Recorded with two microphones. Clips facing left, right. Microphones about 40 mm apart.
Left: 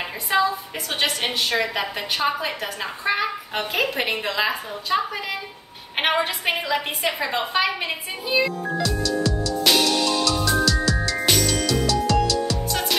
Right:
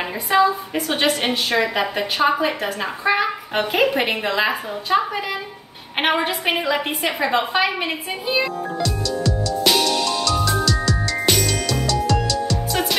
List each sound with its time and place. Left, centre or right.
0.3 s a woman's voice: centre
8.8 s music: centre